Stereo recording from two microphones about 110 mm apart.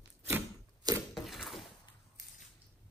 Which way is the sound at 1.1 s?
Centre (ahead or behind).